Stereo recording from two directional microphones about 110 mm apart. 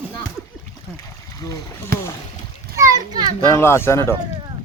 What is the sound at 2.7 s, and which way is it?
Children playing, 30° right (ahead or behind).